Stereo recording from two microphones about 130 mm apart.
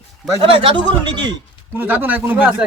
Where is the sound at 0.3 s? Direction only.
45° right (ahead or behind).